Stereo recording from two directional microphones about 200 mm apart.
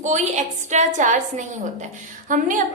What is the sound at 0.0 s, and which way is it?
A woman's voice, 35° right (ahead or behind).